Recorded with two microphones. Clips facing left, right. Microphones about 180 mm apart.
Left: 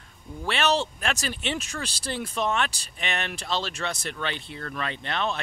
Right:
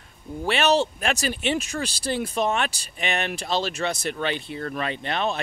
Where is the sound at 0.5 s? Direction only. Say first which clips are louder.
Right 4 dB; 10° right (ahead or behind).